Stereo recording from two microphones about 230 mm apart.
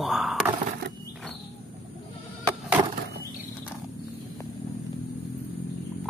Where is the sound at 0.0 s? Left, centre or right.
Centre.